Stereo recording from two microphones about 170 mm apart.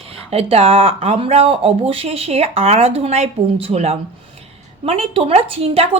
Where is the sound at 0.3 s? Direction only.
35° right (ahead or behind).